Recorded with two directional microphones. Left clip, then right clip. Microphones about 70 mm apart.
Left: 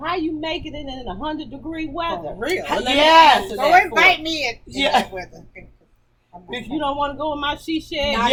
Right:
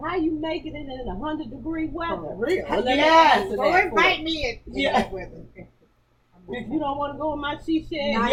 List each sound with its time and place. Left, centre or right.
0.0 s a woman's voice: left
2.0 s speech: left
3.7 s speech: left
4.7 s speech: left
6.7 s speech: left